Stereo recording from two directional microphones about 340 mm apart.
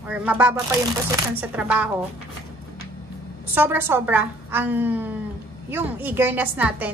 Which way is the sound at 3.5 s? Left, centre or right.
Centre.